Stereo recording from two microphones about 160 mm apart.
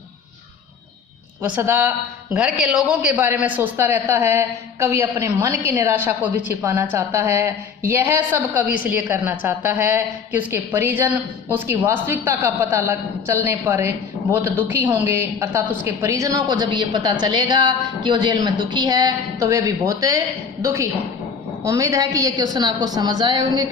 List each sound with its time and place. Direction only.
1.4 s a woman's voice: 10° right (ahead or behind)